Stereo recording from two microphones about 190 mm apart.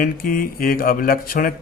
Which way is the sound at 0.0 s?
50° left (ahead or behind).